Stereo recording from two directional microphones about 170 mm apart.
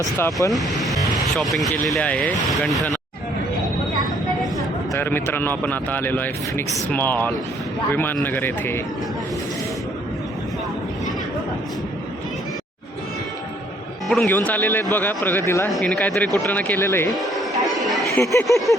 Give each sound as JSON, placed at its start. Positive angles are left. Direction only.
{"t": 0.0, "sound": "speech", "side_deg": 20}
{"t": 0.5, "sound": "music", "side_deg": 0}
{"t": 1.4, "sound": "speech", "side_deg": 0}
{"t": 4.9, "sound": "speech", "side_deg": 15}
{"t": 14.1, "sound": "speech", "side_deg": 5}
{"t": 15.7, "sound": "speech", "side_deg": 5}
{"t": 17.1, "sound": "chatter", "side_deg": 0}
{"t": 18.0, "sound": "a sound", "side_deg": 15}
{"t": 18.4, "sound": "speech", "side_deg": 0}